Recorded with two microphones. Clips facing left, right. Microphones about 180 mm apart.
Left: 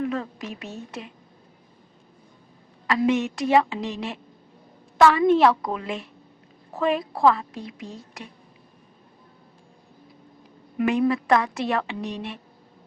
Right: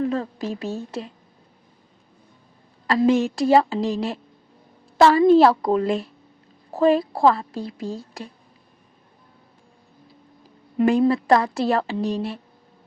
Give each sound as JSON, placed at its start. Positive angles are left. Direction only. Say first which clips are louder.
{"t": 0.0, "sound": "a woman's voice", "louder": "right 4 dB", "side_deg": -30}
{"t": 2.8, "sound": "a woman's voice", "louder": "right 4 dB", "side_deg": -35}
{"t": 10.8, "sound": "a woman's voice", "louder": "right 4 dB", "side_deg": -30}